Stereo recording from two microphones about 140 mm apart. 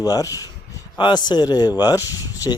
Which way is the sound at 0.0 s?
25° left (ahead or behind).